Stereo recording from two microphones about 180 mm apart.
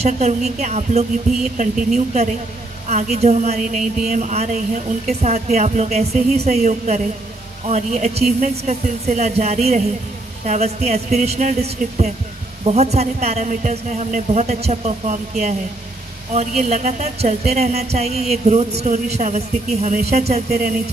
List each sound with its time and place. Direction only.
0.0 s speech: 35° right (ahead or behind)
2.9 s speech: 40° right (ahead or behind)